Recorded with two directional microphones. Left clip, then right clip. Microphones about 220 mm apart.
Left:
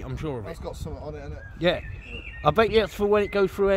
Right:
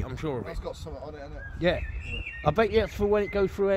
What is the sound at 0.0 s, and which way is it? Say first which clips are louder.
Speech: even; centre (ahead or behind).